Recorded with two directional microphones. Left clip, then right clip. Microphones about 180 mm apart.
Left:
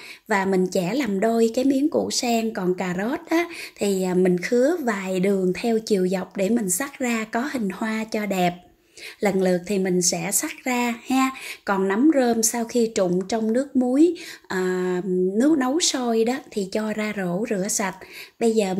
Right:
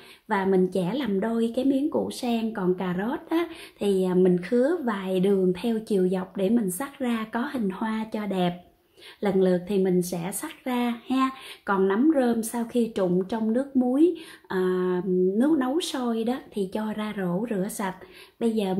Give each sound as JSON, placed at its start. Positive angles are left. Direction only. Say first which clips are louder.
{"t": 0.3, "sound": "a woman's voice", "louder": "left 2 dB", "side_deg": 20}